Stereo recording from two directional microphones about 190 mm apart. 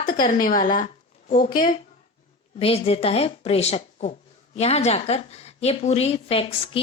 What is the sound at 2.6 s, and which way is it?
A woman's voice, 30° left (ahead or behind).